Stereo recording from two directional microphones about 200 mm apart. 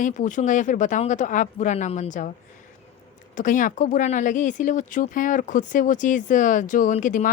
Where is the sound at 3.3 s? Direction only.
40° left (ahead or behind).